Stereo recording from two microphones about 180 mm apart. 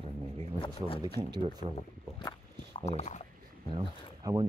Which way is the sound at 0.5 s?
30° left (ahead or behind).